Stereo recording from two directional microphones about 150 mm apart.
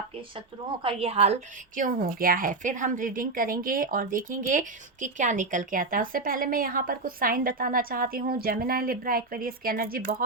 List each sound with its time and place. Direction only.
0.3 s a woman's voice: 35° right (ahead or behind)
1.7 s a woman's voice: 65° right (ahead or behind)